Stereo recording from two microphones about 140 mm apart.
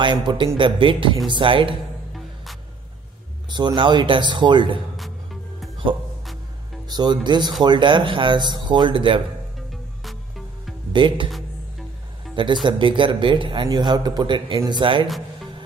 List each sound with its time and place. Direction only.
0.0 s speech: 35° right (ahead or behind)
3.4 s speech: 30° right (ahead or behind)
4.9 s music: centre (ahead or behind)
6.9 s speech: 30° right (ahead or behind)
10.0 s music: centre (ahead or behind)
10.9 s speech: 35° right (ahead or behind)
12.6 s speech: 35° right (ahead or behind)